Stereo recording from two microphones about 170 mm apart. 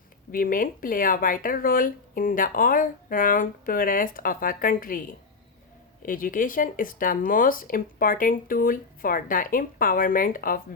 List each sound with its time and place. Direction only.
0.3 s speech: 55° left (ahead or behind)